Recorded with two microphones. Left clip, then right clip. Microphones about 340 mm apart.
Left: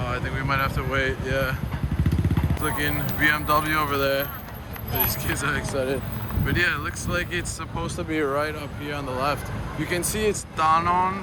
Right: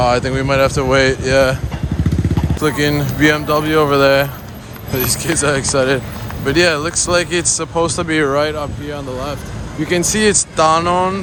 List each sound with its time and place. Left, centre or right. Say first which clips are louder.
0.0 s speech: right 14 dB; centre
2.6 s speech: right 11 dB; centre
8.1 s speech: right 8 dB; right
8.4 s speech: right 9 dB; centre
9.9 s speech: right 11 dB; right
10.6 s speech: right 6 dB; centre